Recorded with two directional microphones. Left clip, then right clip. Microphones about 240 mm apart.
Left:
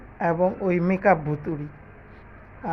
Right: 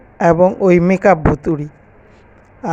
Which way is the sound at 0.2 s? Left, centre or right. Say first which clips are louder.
Right 11 dB; right.